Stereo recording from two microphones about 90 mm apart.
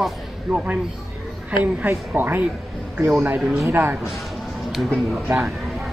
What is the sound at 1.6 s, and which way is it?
A woman's voice, 20° right (ahead or behind).